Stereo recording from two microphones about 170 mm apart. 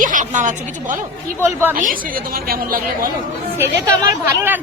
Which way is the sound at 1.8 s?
55° right (ahead or behind).